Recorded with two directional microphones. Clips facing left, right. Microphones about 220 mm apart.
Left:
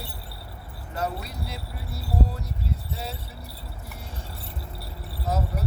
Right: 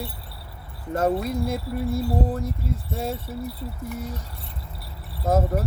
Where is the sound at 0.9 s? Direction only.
50° right (ahead or behind).